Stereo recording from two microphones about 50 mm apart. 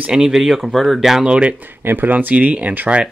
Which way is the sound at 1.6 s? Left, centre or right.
Right.